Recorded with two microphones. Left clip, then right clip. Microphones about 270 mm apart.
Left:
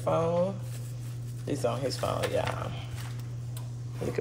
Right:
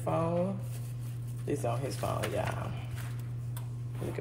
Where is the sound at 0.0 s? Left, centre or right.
Left.